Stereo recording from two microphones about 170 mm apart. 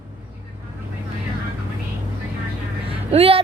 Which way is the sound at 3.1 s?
35° right (ahead or behind).